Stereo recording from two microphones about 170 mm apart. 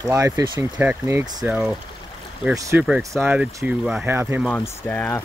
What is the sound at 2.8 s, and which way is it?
Speech, 5° right (ahead or behind).